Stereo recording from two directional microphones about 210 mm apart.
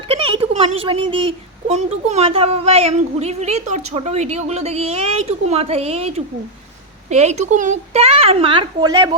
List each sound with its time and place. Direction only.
0.1 s a woman's voice: 25° right (ahead or behind)